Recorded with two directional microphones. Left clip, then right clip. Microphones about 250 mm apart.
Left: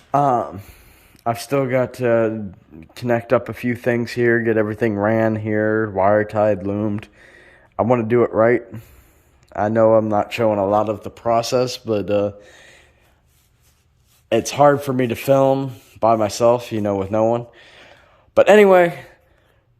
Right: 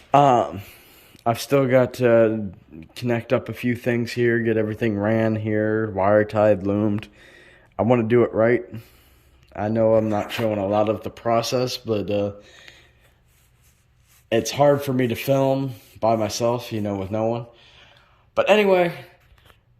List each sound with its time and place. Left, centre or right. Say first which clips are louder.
1.1 s speech: even; centre
2.9 s speech: left 5 dB; centre
14.3 s a man's voice: left 4 dB; centre; by 18.7 s left
18.7 s speech: left 6 dB; centre